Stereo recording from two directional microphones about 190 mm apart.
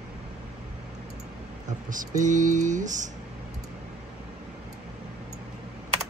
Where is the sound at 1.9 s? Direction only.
40° right (ahead or behind).